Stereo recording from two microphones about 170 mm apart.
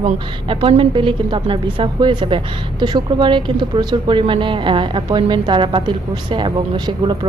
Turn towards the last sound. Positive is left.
turn(degrees=-30)  # may be behind; listen again after turning